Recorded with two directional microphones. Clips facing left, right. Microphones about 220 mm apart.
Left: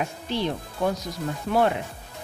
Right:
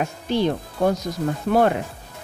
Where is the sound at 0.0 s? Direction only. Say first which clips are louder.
Right 6 dB; 45° right (ahead or behind).